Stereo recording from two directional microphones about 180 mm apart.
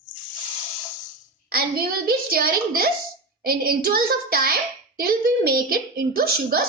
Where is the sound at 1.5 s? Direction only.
55° right (ahead or behind).